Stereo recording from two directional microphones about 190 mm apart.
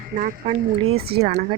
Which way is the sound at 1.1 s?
45° right (ahead or behind).